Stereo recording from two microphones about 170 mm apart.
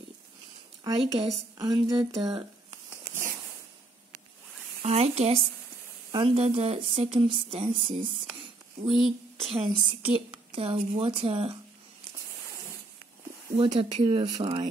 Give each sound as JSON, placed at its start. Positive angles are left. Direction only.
{"t": 0.8, "sound": "speech", "side_deg": -25}
{"t": 4.8, "sound": "a woman's voice", "side_deg": -40}
{"t": 8.8, "sound": "speech", "side_deg": 0}
{"t": 9.4, "sound": "a woman's voice", "side_deg": -35}
{"t": 13.6, "sound": "speech", "side_deg": -30}